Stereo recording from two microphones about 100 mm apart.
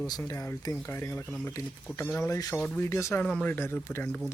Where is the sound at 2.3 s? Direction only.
40° left (ahead or behind).